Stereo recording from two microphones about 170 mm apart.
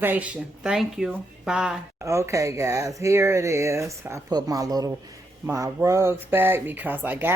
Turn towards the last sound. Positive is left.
turn(degrees=-10)  # may be behind; listen again after turning